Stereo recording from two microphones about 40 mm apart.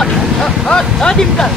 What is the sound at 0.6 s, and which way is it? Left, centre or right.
Speech, centre.